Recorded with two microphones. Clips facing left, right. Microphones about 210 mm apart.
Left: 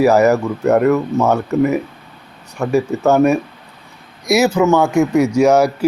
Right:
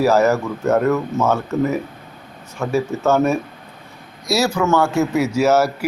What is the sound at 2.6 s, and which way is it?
Speech, 15° left (ahead or behind).